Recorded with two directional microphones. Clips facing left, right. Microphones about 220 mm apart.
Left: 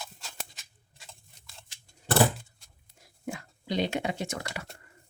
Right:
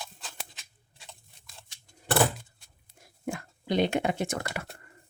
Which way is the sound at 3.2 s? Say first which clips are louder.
Right 3 dB; 55° right (ahead or behind).